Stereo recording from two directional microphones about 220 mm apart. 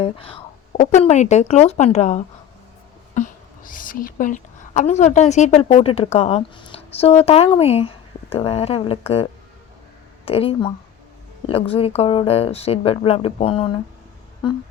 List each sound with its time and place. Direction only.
0.0 s a woman's voice: 25° left (ahead or behind)